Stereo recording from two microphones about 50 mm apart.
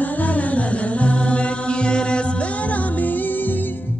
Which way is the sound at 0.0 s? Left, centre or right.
Left.